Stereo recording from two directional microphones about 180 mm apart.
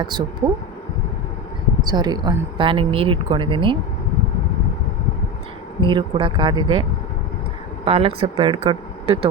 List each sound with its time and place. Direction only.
0.0 s speech: 25° right (ahead or behind)
1.9 s speech: 25° right (ahead or behind)
5.8 s speech: 30° right (ahead or behind)
7.9 s speech: 30° right (ahead or behind)